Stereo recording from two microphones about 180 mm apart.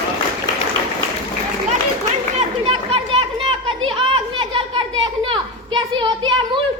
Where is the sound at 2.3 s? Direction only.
35° right (ahead or behind).